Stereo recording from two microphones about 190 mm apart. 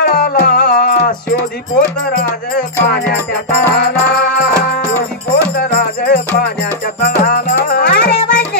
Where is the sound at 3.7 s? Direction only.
55° left (ahead or behind).